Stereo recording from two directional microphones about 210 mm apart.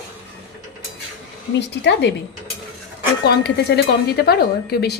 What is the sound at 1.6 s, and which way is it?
Speech, 55° left (ahead or behind).